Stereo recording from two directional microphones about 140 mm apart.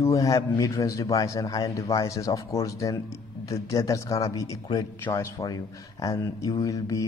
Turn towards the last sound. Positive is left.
turn(degrees=25)  # may be behind; listen again after turning